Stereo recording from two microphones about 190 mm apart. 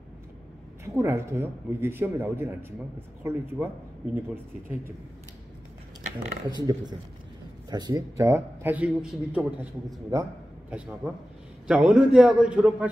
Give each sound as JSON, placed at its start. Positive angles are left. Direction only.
{"t": 0.8, "sound": "a man's voice", "side_deg": -15}
{"t": 6.5, "sound": "a man's voice", "side_deg": -20}
{"t": 11.6, "sound": "a man's voice", "side_deg": -5}